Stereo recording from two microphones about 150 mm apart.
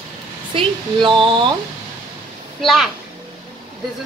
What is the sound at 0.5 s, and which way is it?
Speech, 35° right (ahead or behind).